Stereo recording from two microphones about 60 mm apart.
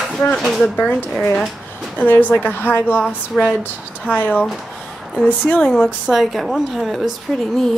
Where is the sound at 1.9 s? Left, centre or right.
Left.